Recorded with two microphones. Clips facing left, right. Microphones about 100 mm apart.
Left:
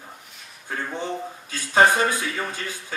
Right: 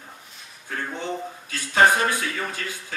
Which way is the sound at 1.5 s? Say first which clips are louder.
Even; 25° left (ahead or behind).